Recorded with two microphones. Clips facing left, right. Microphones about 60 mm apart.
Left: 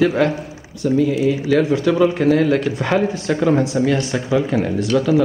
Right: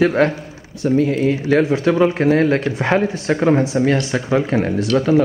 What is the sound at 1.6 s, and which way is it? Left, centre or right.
Speech, right.